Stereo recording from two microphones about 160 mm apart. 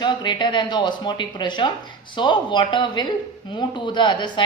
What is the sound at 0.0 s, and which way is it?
A woman's voice, 30° left (ahead or behind).